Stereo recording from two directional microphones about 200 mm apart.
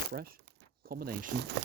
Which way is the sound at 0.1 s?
50° right (ahead or behind).